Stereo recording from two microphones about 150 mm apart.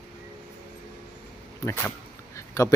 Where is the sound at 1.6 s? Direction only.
15° left (ahead or behind).